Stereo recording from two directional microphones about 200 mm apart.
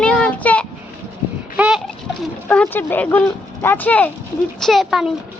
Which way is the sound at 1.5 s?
5° right (ahead or behind).